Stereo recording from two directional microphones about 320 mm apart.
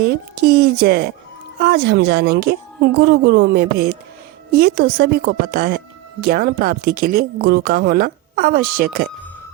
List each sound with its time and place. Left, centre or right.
0.0 s a woman's voice: right